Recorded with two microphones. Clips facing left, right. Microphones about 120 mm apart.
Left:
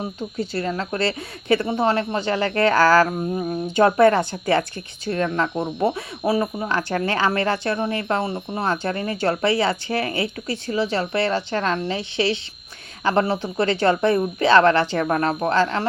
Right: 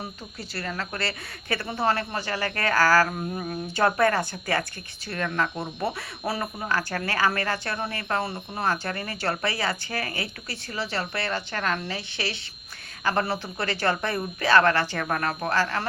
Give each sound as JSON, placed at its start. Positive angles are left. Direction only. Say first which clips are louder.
{"t": 0.0, "sound": "speech", "louder": "left 10 dB", "side_deg": 20}
{"t": 5.8, "sound": "speech", "louder": "left 7 dB", "side_deg": 20}